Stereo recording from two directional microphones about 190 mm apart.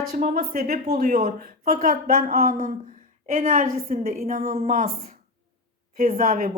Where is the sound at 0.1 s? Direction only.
50° right (ahead or behind).